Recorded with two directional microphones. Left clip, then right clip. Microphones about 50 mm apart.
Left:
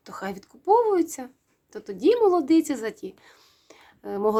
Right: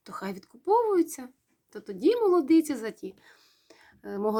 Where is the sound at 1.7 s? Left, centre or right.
Left.